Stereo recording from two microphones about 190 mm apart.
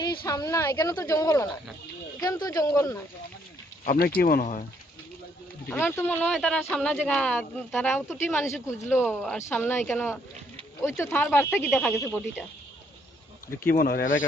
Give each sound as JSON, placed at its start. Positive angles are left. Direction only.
{"t": 0.2, "sound": "speech", "side_deg": 20}
{"t": 3.8, "sound": "speech", "side_deg": 50}
{"t": 5.6, "sound": "speech", "side_deg": 10}
{"t": 9.0, "sound": "speech", "side_deg": 0}
{"t": 9.5, "sound": "speech", "side_deg": 10}
{"t": 13.7, "sound": "speech", "side_deg": 50}